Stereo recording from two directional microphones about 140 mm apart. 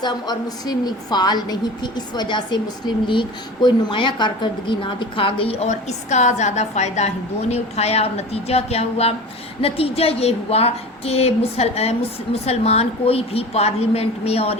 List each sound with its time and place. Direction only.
0.0 s a woman's voice: 30° left (ahead or behind); by 14.6 s 45° left (ahead or behind)